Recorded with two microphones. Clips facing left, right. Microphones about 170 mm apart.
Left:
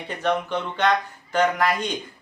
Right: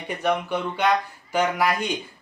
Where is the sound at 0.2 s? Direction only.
10° right (ahead or behind).